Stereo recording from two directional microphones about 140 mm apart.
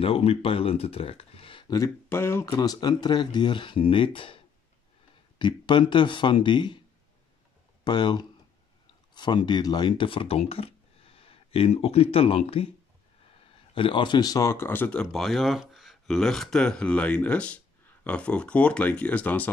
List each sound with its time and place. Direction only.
0.0 s speech: 45° left (ahead or behind)
2.0 s speech: 15° left (ahead or behind); by 4.4 s 40° left (ahead or behind)
5.4 s speech: 35° left (ahead or behind)
7.8 s speech: 30° left (ahead or behind)
13.7 s speech: 35° left (ahead or behind); by 19.5 s 10° left (ahead or behind)